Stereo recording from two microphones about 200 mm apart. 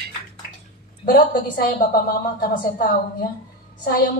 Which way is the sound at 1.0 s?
45° left (ahead or behind).